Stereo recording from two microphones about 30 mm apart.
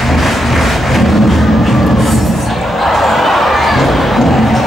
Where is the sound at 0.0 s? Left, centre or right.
Centre.